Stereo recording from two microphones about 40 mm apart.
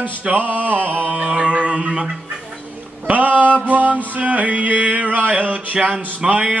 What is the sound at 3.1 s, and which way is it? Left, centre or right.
Music, right.